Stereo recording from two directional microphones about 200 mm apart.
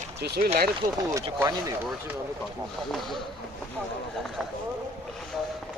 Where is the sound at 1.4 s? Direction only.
15° right (ahead or behind).